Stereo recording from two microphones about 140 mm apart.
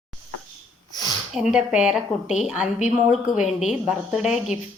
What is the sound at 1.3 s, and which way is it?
Speech, 5° right (ahead or behind).